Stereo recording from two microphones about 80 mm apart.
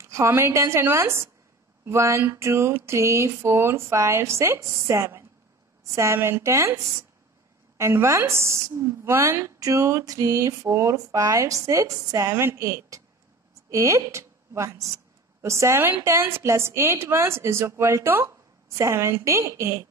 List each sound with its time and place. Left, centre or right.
0.0 s a woman's voice: right